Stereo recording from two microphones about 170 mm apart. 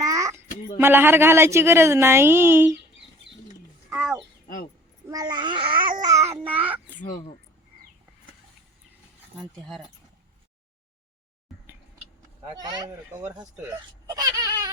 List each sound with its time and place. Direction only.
0.0 s a sound: 20° right (ahead or behind)
0.8 s a woman's voice: 10° right (ahead or behind)
3.8 s a sound: 10° right (ahead or behind)
5.0 s babbling: 25° right (ahead or behind)
6.3 s child singing: 10° right (ahead or behind)
9.4 s speech: centre (ahead or behind)
12.6 s speech: 20° right (ahead or behind)
14.2 s baby cry: 20° right (ahead or behind)